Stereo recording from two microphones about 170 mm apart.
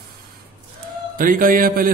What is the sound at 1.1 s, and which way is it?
Speech, 55° right (ahead or behind).